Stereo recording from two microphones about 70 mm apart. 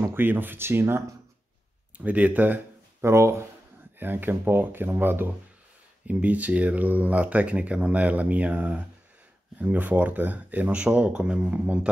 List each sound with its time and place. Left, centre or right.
0.0 s speech: right
2.0 s speech: right
3.0 s speech: right
4.0 s speech: right
11.4 s speech: right